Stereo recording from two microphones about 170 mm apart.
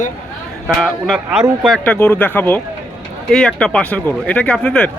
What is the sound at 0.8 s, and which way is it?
Speech, 5° left (ahead or behind).